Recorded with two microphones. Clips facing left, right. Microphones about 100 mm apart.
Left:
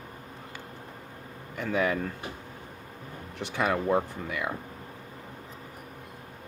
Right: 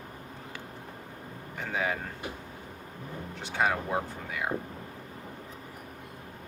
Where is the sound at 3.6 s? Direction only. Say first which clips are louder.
Left 3 dB; 60° left (ahead or behind).